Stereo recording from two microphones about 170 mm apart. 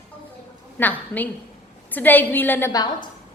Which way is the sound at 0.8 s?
10° left (ahead or behind).